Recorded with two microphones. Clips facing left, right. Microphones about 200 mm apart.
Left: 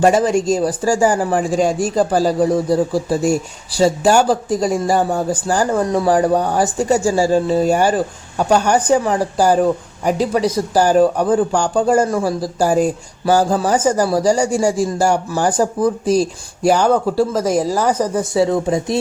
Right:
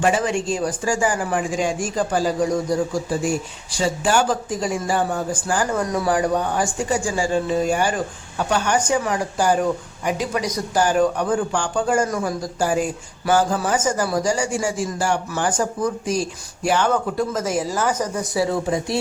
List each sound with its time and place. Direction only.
0.0 s a man's voice: 40° left (ahead or behind)
5.8 s speech: 25° left (ahead or behind)
6.1 s a man's voice: 35° left (ahead or behind)
18.3 s speech: 20° left (ahead or behind)